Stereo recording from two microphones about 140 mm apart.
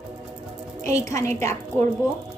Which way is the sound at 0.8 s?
20° left (ahead or behind).